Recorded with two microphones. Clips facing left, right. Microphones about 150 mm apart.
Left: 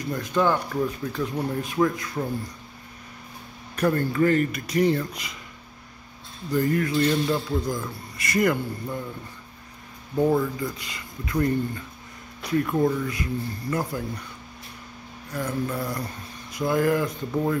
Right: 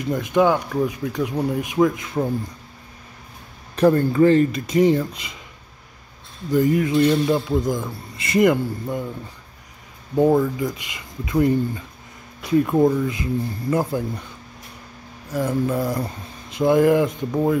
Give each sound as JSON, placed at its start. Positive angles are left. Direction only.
{"t": 0.0, "sound": "speech", "side_deg": -20}
{"t": 3.7, "sound": "a man's voice", "side_deg": -30}
{"t": 6.5, "sound": "a man's voice", "side_deg": -20}
{"t": 10.1, "sound": "a man's voice", "side_deg": -20}
{"t": 12.5, "sound": "a man's voice", "side_deg": -20}
{"t": 15.4, "sound": "a man's voice", "side_deg": -25}